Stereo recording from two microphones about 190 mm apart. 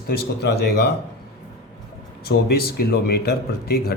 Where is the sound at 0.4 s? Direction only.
60° left (ahead or behind).